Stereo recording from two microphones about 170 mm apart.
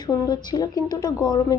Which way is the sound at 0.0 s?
25° left (ahead or behind).